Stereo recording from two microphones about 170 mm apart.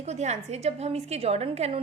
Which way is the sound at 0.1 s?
40° right (ahead or behind).